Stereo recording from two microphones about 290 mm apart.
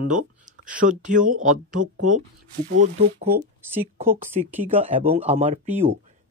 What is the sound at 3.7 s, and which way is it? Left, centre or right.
Speech, centre.